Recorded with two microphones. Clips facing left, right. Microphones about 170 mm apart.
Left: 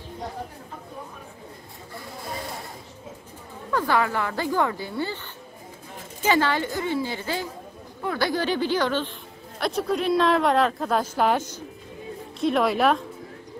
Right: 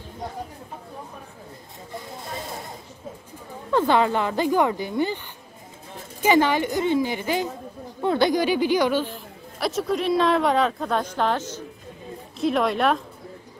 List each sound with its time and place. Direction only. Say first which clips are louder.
3.7 s speech: right 4 dB; 20° right (ahead or behind)
6.2 s a woman's voice: right 3 dB; 15° right (ahead or behind); by 11.6 s 10° left (ahead or behind)
12.4 s a woman's voice: even; centre (ahead or behind)